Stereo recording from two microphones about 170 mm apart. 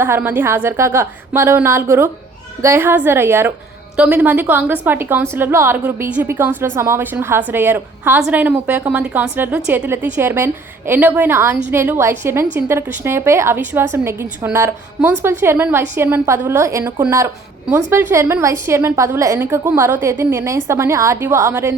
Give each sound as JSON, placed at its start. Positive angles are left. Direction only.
{"t": 0.0, "sound": "a woman's voice", "side_deg": -10}